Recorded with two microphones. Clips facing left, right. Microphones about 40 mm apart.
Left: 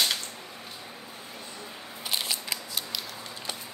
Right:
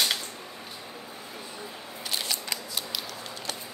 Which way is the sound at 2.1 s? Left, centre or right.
Centre.